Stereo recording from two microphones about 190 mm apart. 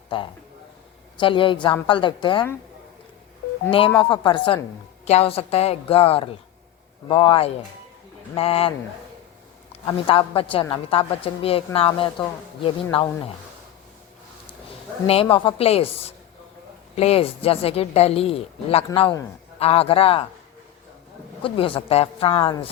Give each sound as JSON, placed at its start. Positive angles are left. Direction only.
{"t": 1.2, "sound": "a woman's voice", "side_deg": 25}
{"t": 3.7, "sound": "a woman's voice", "side_deg": 30}
{"t": 9.8, "sound": "a woman's voice", "side_deg": 30}
{"t": 15.0, "sound": "a woman's voice", "side_deg": 30}
{"t": 21.4, "sound": "a woman's voice", "side_deg": 30}